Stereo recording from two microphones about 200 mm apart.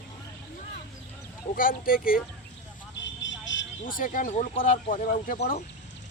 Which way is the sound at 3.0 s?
65° left (ahead or behind).